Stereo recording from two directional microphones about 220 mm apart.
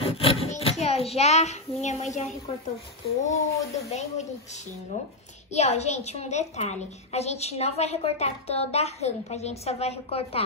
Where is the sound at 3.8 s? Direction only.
30° left (ahead or behind).